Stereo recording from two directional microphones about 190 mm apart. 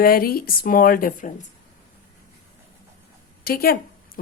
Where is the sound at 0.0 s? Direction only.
50° left (ahead or behind).